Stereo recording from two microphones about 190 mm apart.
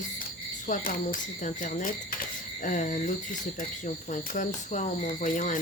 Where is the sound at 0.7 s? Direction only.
45° left (ahead or behind).